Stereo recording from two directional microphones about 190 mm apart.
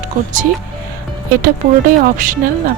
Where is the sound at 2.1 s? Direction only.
45° right (ahead or behind).